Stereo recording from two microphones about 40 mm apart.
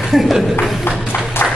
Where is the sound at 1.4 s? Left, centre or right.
Left.